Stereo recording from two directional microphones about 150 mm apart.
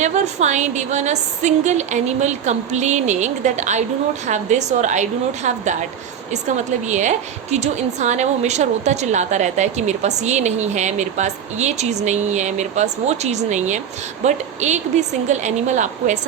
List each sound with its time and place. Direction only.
0.0 s a woman's voice: 50° right (ahead or behind)
6.8 s a woman's voice: 55° right (ahead or behind)